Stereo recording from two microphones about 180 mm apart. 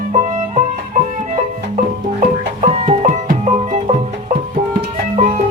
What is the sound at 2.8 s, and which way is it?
Music, 40° right (ahead or behind).